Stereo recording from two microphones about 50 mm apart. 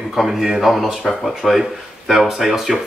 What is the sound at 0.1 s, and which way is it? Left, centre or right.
Speech, centre.